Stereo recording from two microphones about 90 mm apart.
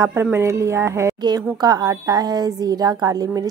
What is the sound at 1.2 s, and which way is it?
A woman's voice, 50° right (ahead or behind).